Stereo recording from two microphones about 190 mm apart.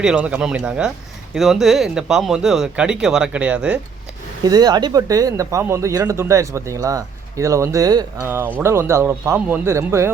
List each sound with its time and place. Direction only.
0.0 s speech: 5° right (ahead or behind)
4.4 s speech: 20° right (ahead or behind)